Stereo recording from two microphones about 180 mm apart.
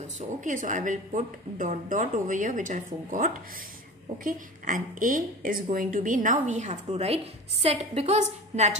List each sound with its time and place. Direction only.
0.4 s a woman's voice: 45° right (ahead or behind)